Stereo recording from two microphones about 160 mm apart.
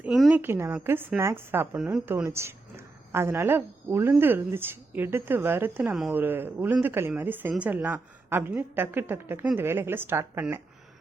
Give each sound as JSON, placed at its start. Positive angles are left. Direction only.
{"t": 0.0, "sound": "a woman's voice", "side_deg": -5}